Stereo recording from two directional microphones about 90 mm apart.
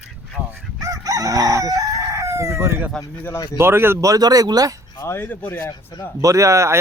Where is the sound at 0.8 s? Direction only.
40° right (ahead or behind).